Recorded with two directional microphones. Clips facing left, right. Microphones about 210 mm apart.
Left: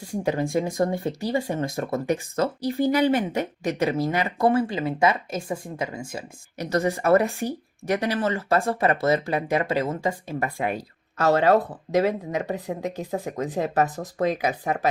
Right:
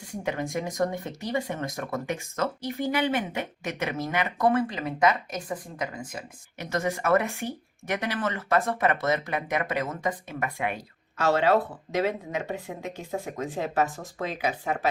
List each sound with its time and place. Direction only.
0.2 s speech: 35° left (ahead or behind)